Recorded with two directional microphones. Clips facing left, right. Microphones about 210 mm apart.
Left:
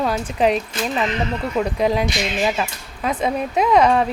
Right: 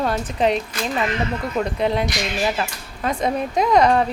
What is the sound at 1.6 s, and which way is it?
Speech, 10° left (ahead or behind).